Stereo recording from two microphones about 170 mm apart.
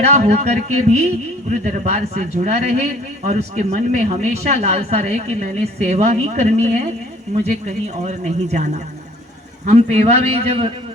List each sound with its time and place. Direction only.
0.0 s a man's voice: 40° right (ahead or behind)